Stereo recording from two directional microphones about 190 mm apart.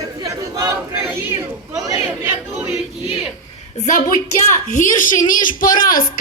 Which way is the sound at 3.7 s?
40° left (ahead or behind).